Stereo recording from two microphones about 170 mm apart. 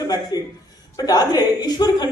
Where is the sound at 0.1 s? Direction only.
20° left (ahead or behind).